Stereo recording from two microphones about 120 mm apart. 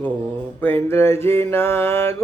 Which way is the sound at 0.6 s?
20° left (ahead or behind).